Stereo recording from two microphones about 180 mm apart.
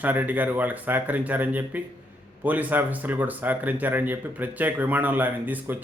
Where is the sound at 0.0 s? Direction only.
10° right (ahead or behind).